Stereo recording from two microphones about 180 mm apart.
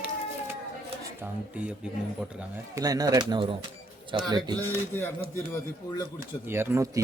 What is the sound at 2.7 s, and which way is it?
Speech, 20° right (ahead or behind).